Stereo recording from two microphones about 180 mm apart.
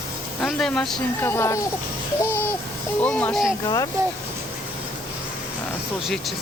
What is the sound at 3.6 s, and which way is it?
Speech, 20° left (ahead or behind).